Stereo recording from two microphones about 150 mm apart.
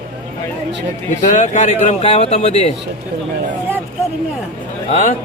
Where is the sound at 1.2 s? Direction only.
55° left (ahead or behind).